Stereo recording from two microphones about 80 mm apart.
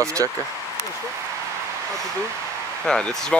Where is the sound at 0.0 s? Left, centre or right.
Right.